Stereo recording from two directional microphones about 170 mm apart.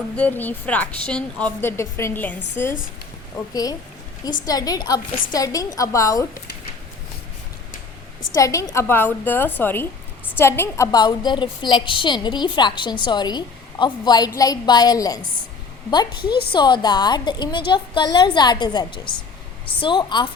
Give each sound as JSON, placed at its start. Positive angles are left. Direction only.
{"t": 0.2, "sound": "a woman's voice", "side_deg": 10}
{"t": 3.5, "sound": "a woman's voice", "side_deg": 20}
{"t": 8.4, "sound": "a woman's voice", "side_deg": 20}